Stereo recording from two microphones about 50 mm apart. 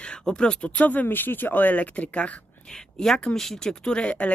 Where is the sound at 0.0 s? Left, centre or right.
Centre.